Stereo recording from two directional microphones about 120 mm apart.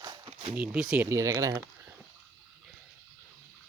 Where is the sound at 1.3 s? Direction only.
40° right (ahead or behind).